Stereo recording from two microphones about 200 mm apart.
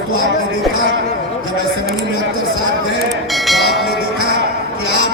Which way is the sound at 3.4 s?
Centre (ahead or behind).